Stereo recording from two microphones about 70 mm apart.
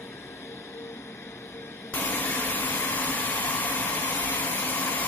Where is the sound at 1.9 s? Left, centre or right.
Left.